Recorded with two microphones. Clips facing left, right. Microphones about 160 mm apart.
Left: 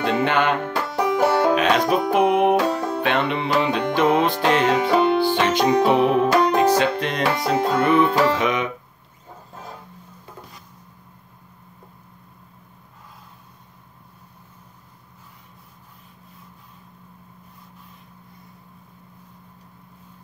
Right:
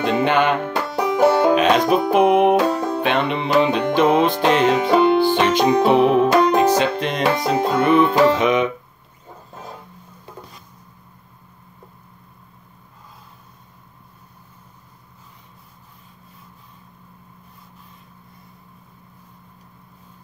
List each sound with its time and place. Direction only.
0.0 s music: 20° right (ahead or behind)